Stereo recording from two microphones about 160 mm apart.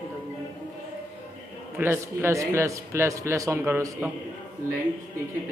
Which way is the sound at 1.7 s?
15° right (ahead or behind).